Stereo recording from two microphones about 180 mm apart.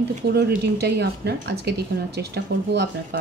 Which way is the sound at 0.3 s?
65° right (ahead or behind).